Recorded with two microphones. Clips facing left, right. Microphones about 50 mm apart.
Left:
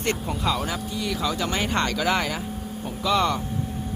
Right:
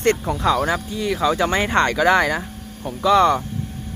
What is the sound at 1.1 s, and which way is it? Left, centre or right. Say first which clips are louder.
Speech: right 8 dB; right.